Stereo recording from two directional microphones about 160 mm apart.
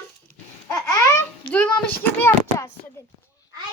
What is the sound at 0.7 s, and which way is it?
Babbling, 20° left (ahead or behind).